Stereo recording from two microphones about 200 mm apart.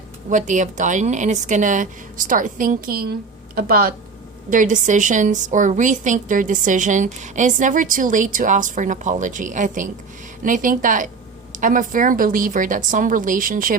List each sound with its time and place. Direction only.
0.3 s a woman's voice: 40° right (ahead or behind)